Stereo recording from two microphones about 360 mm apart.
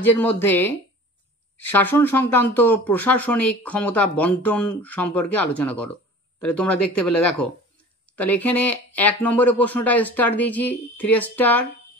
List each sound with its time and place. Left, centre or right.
0.0 s speech: centre